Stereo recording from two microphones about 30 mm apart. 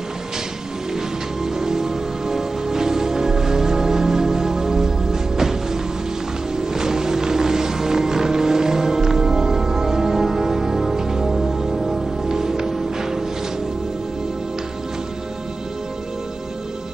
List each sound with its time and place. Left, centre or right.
1.4 s music: centre
12.3 s music: centre